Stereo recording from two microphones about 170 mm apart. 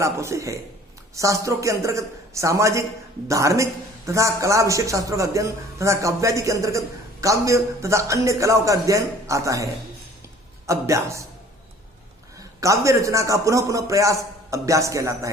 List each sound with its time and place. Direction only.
0.0 s a man's voice: 15° right (ahead or behind)
10.7 s a man's voice: 15° right (ahead or behind)
12.5 s a woman's voice: 20° right (ahead or behind)